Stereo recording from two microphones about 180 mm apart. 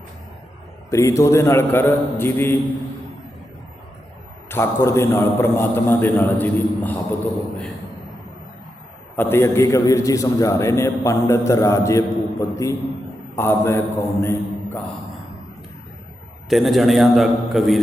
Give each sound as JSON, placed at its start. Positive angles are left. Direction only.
{"t": 0.9, "sound": "a man's voice", "side_deg": 15}
{"t": 4.4, "sound": "a man's voice", "side_deg": 15}
{"t": 9.1, "sound": "a man's voice", "side_deg": 10}
{"t": 16.5, "sound": "a man's voice", "side_deg": 0}